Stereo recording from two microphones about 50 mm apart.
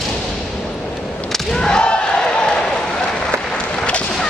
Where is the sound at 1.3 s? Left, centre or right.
Centre.